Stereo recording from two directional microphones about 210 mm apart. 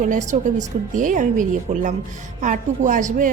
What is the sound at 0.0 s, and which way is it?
A woman's voice, 35° right (ahead or behind).